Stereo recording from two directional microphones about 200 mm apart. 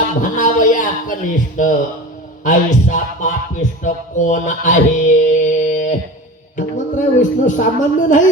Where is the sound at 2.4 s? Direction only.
40° left (ahead or behind).